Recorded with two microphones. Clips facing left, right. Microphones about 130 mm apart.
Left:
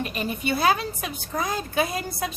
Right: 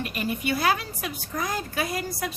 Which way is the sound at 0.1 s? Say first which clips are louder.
Left 1 dB; 25° left (ahead or behind).